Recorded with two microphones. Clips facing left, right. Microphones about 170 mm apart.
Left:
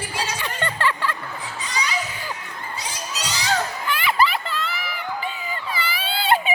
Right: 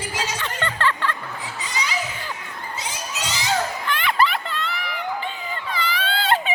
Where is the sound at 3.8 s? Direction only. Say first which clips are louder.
Left 2 dB; 5° left (ahead or behind).